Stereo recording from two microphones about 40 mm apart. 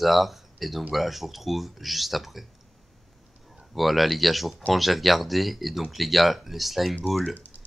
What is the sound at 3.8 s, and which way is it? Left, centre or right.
Speech, centre.